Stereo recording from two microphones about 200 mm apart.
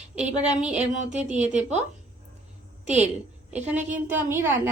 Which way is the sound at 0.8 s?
35° right (ahead or behind).